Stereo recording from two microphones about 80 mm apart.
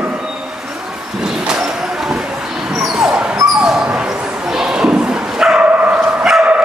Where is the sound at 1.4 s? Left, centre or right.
Centre.